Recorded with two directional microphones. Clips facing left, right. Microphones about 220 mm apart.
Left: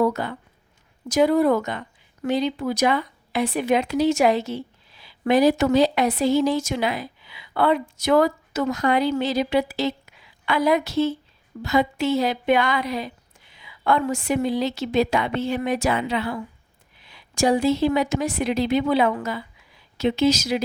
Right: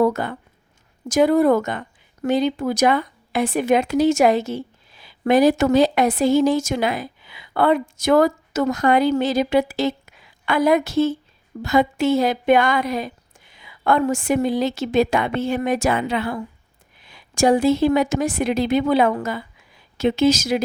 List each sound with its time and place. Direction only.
0.0 s speech: 50° right (ahead or behind)